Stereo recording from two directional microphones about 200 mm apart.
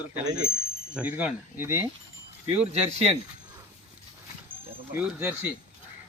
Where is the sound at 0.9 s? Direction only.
5° right (ahead or behind).